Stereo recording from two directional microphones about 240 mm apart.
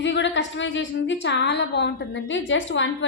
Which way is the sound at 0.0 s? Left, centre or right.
Left.